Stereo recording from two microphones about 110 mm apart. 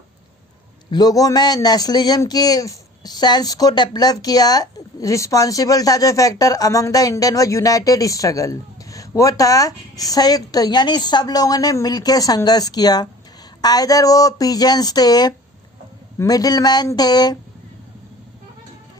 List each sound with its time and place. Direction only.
0.9 s a man's voice: 40° left (ahead or behind)